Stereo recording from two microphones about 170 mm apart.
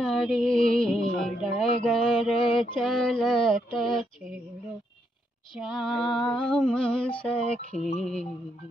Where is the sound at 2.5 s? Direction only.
Centre (ahead or behind).